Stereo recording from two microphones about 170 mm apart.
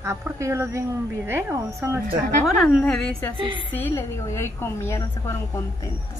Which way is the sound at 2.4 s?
5° left (ahead or behind).